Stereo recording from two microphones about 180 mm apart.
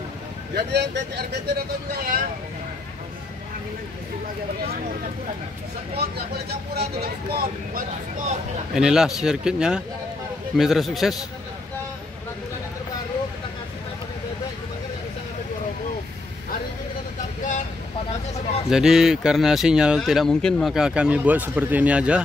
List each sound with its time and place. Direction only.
0.6 s speech: 70° right (ahead or behind); by 2.2 s 55° right (ahead or behind)
6.3 s speech: 60° right (ahead or behind)
8.7 s speech: 5° right (ahead or behind)
18.7 s speech: 5° right (ahead or behind)